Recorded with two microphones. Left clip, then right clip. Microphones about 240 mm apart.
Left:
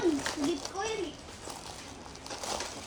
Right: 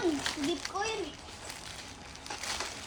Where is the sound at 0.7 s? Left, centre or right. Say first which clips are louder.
Right 1 dB; centre.